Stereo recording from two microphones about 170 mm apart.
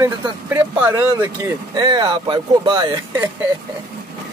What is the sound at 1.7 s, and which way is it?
Speech, 25° right (ahead or behind).